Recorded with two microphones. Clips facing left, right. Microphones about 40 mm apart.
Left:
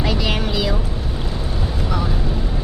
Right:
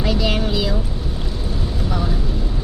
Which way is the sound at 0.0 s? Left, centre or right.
Centre.